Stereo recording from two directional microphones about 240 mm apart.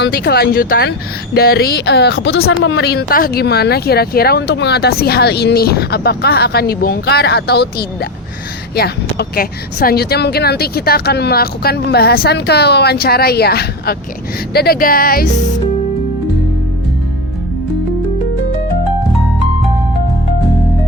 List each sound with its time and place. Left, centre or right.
0.0 s speech: left